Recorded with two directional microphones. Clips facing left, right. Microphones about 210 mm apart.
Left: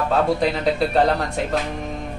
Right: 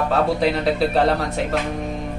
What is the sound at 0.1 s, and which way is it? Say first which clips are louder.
Speech: left 1 dB; centre (ahead or behind).